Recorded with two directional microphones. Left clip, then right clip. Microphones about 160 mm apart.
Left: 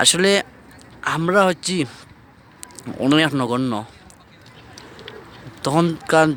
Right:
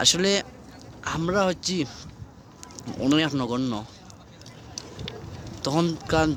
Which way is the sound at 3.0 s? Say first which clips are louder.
Left 6 dB; 25° left (ahead or behind).